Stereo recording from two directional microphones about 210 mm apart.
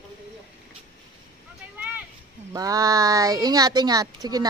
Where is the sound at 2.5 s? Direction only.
15° right (ahead or behind).